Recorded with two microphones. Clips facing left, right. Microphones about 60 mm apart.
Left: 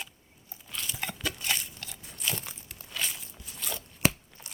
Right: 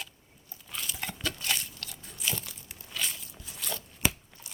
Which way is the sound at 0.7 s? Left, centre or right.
Centre.